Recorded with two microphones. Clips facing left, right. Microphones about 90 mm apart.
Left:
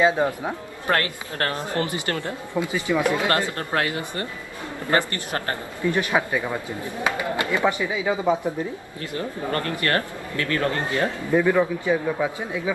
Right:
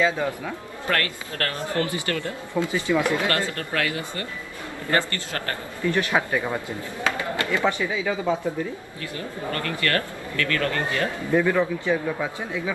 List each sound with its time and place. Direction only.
0.0 s speech: 25° left (ahead or behind)
6.3 s speech: 5° right (ahead or behind)
6.8 s speech: 20° left (ahead or behind)
9.1 s speech: 30° left (ahead or behind)
11.3 s a man's voice: 10° left (ahead or behind)